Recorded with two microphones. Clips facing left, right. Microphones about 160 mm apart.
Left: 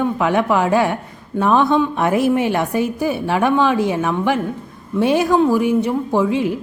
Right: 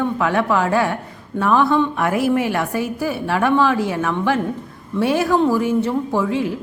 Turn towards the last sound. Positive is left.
turn(degrees=20)  # may be behind; listen again after turning